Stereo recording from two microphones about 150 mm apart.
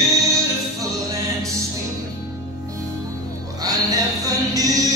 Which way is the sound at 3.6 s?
25° right (ahead or behind).